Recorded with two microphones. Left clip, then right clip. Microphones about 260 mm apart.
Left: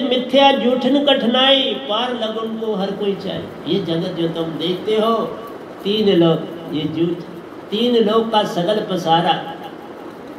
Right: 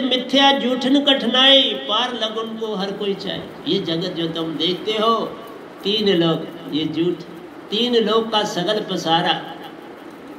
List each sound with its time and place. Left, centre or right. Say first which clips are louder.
0.1 s a man's voice: left 3 dB; right